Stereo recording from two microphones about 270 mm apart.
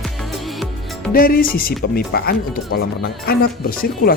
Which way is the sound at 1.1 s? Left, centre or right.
Left.